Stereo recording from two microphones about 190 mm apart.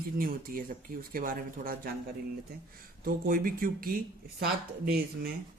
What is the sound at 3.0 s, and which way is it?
Speech, 50° right (ahead or behind).